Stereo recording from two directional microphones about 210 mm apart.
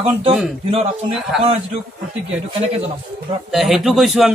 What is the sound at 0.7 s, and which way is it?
Speech, 25° right (ahead or behind).